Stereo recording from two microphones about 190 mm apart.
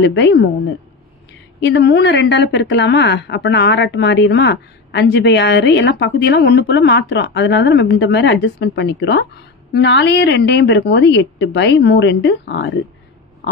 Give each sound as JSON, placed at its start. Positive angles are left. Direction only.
{"t": 0.0, "sound": "a woman's voice", "side_deg": 70}
{"t": 1.6, "sound": "speech", "side_deg": 65}